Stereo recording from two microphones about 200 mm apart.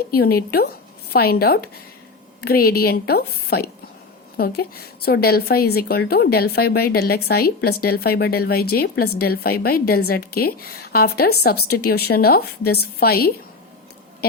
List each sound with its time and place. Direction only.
0.1 s a woman's voice: 50° left (ahead or behind)